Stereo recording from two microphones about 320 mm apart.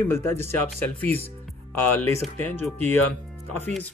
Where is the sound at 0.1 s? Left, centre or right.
Centre.